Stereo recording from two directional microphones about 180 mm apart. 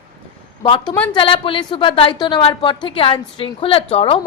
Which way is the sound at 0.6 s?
30° left (ahead or behind).